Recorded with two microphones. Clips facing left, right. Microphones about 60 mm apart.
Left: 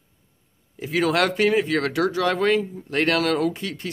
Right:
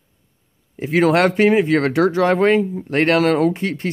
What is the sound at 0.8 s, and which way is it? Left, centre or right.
Speech, right.